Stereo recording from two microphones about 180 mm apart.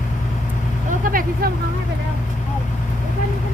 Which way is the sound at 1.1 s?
50° right (ahead or behind).